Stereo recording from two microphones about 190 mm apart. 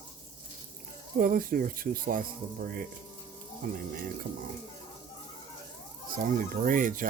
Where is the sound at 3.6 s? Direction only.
50° right (ahead or behind).